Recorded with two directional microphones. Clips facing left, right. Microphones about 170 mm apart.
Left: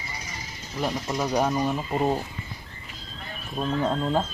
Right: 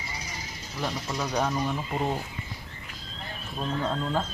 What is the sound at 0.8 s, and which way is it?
Speech, 15° left (ahead or behind).